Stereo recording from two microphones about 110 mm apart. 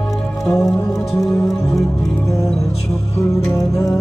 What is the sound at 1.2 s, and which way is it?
Music, 30° left (ahead or behind).